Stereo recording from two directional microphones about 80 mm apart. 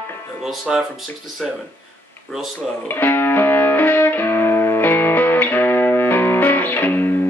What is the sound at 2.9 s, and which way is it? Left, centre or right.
Music, left.